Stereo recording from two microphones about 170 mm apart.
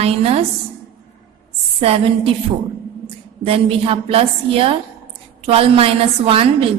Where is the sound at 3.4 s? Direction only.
35° right (ahead or behind).